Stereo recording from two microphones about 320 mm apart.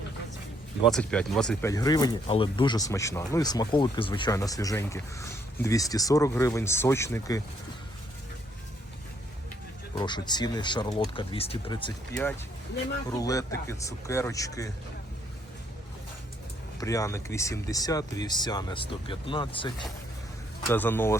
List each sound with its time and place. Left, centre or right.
0.9 s speech: centre
9.9 s speech: centre
13.1 s speech: centre
16.8 s speech: centre